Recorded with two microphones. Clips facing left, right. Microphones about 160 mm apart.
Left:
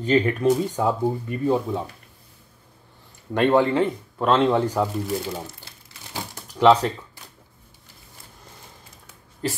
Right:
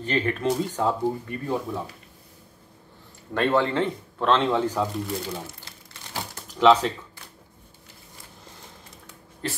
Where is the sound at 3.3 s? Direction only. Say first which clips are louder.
Left 4 dB; 15° left (ahead or behind).